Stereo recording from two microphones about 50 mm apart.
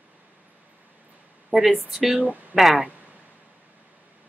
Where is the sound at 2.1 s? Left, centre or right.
Right.